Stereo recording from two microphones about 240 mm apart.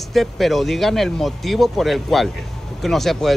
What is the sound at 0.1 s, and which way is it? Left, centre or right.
Speech, centre.